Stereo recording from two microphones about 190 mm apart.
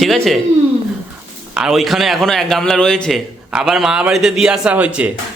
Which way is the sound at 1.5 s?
Centre (ahead or behind).